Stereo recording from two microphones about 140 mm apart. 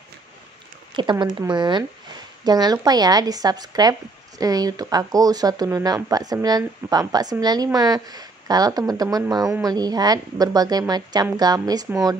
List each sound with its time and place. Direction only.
1.1 s speech: 20° right (ahead or behind)
1.5 s speech: 30° right (ahead or behind)